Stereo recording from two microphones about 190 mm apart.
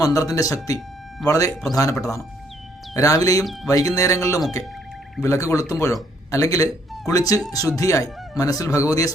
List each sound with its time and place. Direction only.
0.0 s speech: 20° left (ahead or behind)
3.4 s speech: centre (ahead or behind)
3.7 s speech: 15° left (ahead or behind)